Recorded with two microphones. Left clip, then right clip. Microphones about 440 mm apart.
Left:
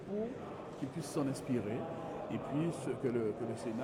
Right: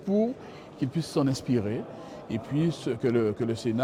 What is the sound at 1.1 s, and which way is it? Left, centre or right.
Speech, right.